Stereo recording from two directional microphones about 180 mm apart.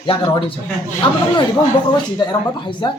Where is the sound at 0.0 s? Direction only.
30° left (ahead or behind).